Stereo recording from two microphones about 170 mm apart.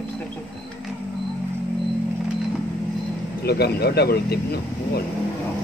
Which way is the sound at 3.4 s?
70° left (ahead or behind).